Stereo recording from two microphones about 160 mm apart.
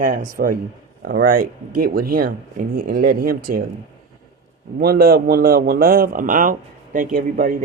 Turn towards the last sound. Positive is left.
turn(degrees=-60)  # may be behind; listen again after turning